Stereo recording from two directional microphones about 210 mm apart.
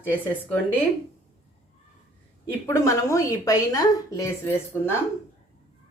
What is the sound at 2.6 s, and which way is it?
A woman's voice, 15° left (ahead or behind).